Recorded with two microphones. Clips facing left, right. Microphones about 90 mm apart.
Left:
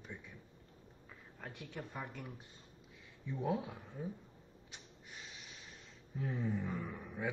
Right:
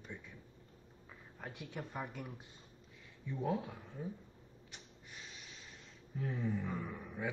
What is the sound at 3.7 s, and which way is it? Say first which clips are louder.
Speech: left 1 dB; 15° left (ahead or behind).